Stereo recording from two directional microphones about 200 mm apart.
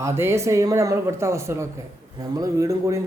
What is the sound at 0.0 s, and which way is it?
A man's voice, 10° right (ahead or behind).